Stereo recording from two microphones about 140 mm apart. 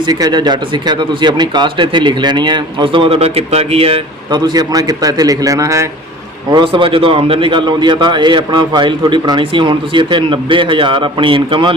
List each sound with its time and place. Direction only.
0.0 s speech: 30° right (ahead or behind)
6.5 s speech: 35° right (ahead or behind)